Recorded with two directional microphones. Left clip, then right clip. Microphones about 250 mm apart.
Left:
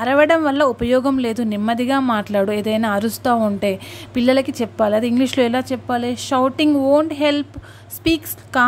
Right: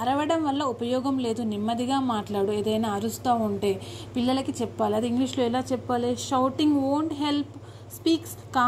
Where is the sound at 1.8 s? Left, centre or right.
Left.